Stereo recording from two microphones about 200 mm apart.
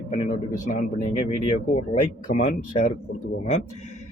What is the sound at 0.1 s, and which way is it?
Speech, 40° left (ahead or behind).